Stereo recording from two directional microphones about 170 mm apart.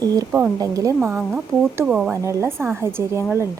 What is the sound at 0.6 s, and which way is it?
Speech, 20° right (ahead or behind).